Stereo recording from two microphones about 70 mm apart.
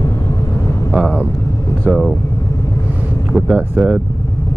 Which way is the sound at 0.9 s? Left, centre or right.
Centre.